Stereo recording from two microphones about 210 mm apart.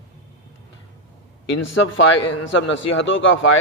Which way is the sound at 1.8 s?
65° left (ahead or behind).